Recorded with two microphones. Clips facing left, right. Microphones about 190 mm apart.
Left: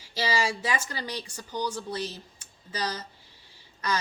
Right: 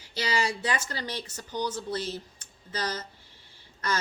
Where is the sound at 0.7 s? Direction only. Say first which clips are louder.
Even; 10° left (ahead or behind).